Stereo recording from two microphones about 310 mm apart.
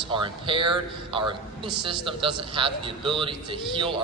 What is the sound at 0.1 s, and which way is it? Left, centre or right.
A man's voice, centre.